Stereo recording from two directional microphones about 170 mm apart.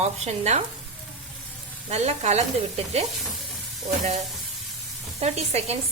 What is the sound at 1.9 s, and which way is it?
Speech, 40° right (ahead or behind).